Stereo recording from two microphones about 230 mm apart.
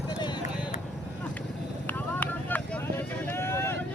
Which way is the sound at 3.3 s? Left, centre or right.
Centre.